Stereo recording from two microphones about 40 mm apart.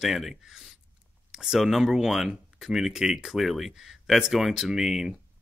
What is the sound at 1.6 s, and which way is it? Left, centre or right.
Speech, centre.